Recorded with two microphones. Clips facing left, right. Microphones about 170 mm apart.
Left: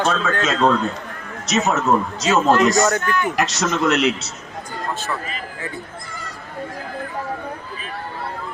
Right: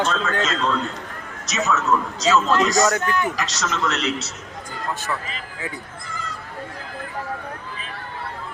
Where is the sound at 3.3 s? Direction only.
55° left (ahead or behind).